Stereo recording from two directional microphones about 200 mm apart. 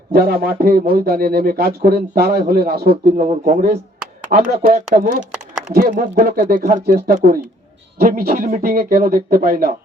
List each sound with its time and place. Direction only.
0.1 s a man's voice: 50° right (ahead or behind)
3.2 s a man's voice: 40° right (ahead or behind)